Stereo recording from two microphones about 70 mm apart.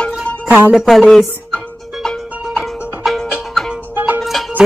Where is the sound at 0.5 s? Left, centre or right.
Right.